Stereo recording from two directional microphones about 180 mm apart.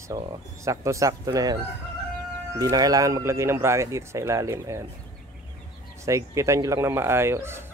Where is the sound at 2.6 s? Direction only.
20° right (ahead or behind).